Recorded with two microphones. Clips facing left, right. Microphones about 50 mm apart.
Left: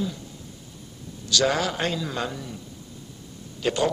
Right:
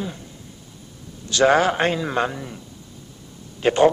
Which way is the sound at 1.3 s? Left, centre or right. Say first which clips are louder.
Right 7 dB; right.